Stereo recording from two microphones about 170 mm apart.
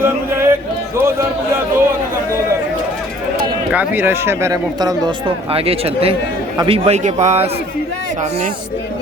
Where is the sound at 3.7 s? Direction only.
10° right (ahead or behind); by 8.5 s 40° right (ahead or behind).